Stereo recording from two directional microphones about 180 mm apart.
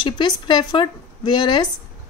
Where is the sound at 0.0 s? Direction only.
25° left (ahead or behind).